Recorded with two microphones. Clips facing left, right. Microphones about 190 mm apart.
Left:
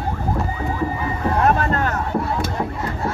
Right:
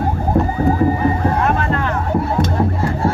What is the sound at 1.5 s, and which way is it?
Music, 40° left (ahead or behind).